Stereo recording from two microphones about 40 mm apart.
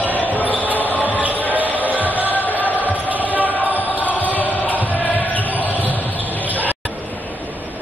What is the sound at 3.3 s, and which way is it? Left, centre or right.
Basketball bounce, right.